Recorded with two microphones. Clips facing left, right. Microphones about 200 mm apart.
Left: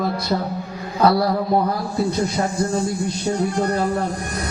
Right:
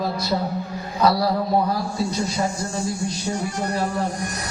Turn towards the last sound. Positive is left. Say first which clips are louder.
# left 4 dB
turn(degrees=55)  # may be behind; listen again after turning